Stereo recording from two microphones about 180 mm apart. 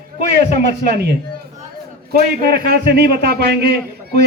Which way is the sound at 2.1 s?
55° right (ahead or behind).